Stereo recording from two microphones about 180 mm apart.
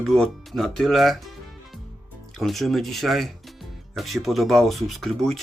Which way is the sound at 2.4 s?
Centre (ahead or behind).